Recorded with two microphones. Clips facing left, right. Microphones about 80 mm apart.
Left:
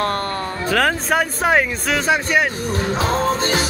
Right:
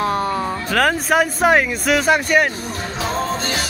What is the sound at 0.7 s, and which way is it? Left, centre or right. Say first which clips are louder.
Speech: right 2 dB; centre.